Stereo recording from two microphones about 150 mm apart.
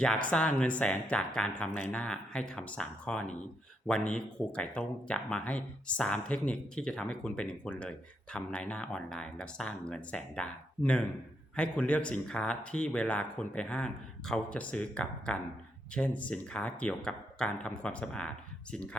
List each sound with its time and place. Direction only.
0.0 s speech: 5° left (ahead or behind)